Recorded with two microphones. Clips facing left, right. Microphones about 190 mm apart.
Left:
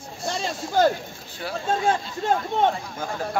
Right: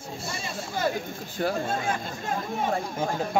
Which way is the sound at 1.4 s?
45° right (ahead or behind).